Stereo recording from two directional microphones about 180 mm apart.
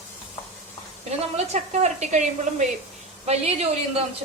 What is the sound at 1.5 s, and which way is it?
A woman's voice, 40° right (ahead or behind).